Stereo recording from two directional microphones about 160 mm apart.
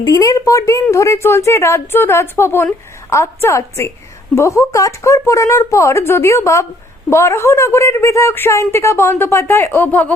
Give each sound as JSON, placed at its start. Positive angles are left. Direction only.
{"t": 0.0, "sound": "a woman's voice", "side_deg": 20}